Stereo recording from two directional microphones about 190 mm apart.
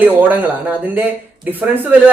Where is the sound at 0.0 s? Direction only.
10° right (ahead or behind).